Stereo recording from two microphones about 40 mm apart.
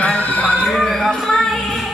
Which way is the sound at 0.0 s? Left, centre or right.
Left.